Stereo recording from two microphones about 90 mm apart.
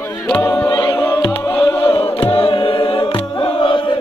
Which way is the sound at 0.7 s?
60° left (ahead or behind).